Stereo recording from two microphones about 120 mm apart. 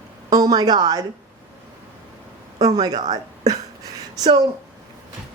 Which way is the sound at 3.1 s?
30° right (ahead or behind).